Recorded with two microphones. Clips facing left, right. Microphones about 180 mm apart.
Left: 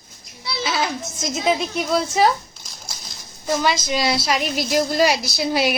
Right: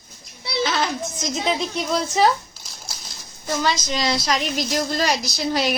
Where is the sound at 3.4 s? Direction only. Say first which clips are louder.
Left 2 dB; 15° left (ahead or behind).